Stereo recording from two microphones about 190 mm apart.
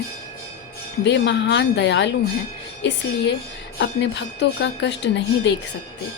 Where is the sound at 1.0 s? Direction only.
65° left (ahead or behind).